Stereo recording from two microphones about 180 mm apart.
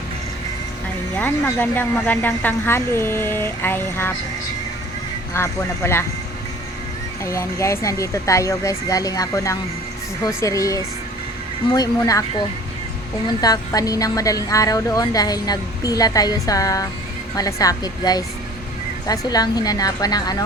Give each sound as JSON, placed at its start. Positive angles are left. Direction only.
{"t": 1.1, "sound": "speech", "side_deg": 10}
{"t": 5.3, "sound": "speech", "side_deg": 15}
{"t": 7.3, "sound": "speech", "side_deg": 15}
{"t": 13.4, "sound": "speech", "side_deg": 20}